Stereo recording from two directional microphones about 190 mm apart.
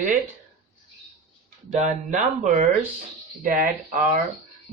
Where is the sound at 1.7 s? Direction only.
40° right (ahead or behind).